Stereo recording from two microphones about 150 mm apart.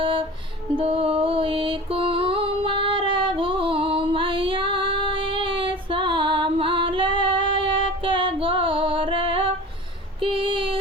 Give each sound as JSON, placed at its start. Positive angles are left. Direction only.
{"t": 0.0, "sound": "music", "side_deg": -35}
{"t": 10.3, "sound": "female singing", "side_deg": -35}